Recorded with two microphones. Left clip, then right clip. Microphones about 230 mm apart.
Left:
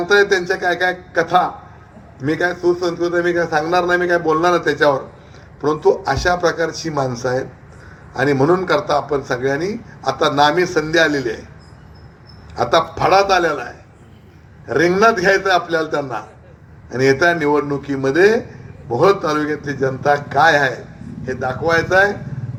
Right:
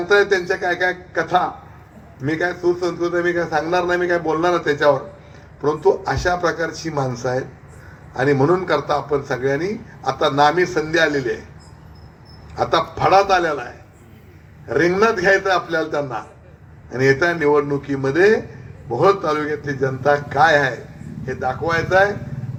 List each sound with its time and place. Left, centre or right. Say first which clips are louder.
0.0 s a man's voice: left 2 dB; left
12.5 s a man's voice: left 3 dB; left